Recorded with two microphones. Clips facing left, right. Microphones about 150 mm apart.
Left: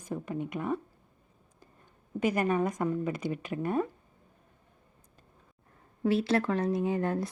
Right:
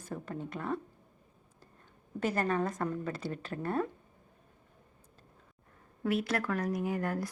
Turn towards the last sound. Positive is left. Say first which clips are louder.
# left 4 dB
turn(degrees=25)  # may be behind; listen again after turning